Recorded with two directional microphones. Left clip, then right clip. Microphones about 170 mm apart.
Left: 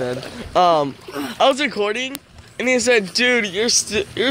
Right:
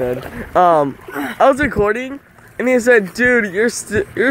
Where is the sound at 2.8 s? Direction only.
35° right (ahead or behind).